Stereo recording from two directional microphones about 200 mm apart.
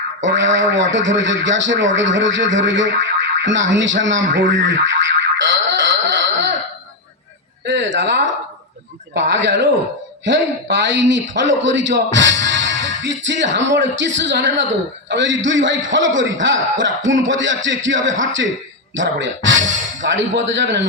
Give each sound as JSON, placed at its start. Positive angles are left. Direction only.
{"t": 0.2, "sound": "a man's voice", "side_deg": -65}
{"t": 7.6, "sound": "a sound", "side_deg": -60}
{"t": 9.1, "sound": "a man's voice", "side_deg": -65}